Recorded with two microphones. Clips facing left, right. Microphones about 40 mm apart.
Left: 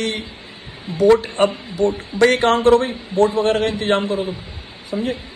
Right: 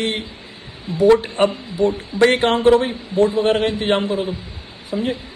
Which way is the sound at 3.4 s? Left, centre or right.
Right.